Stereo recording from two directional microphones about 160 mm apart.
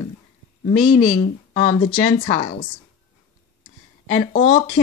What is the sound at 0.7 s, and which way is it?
Speech, 35° left (ahead or behind).